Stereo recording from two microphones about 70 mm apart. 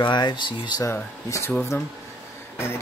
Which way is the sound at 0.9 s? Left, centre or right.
Left.